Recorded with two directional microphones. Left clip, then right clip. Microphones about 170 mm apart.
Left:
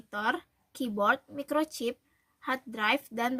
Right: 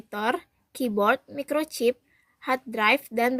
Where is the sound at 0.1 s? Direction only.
25° right (ahead or behind).